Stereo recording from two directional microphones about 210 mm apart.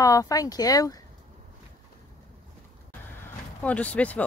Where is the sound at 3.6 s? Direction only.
5° left (ahead or behind).